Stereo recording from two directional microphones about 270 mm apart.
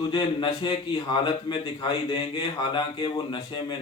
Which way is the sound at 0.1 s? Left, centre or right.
Centre.